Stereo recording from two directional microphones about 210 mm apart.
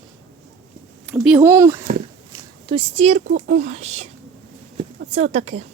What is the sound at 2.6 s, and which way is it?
A woman's voice, 25° right (ahead or behind).